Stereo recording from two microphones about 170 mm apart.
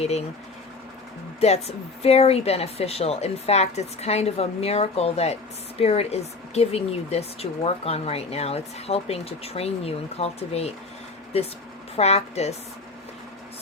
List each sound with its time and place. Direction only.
0.0 s speech: 35° left (ahead or behind)
1.4 s speech: 40° left (ahead or behind)